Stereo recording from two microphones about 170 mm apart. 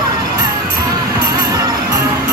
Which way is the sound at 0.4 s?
20° right (ahead or behind).